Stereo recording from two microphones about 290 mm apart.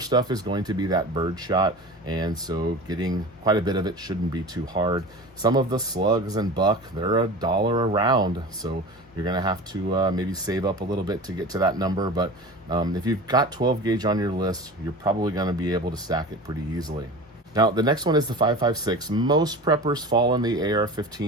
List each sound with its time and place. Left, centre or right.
0.0 s speech: centre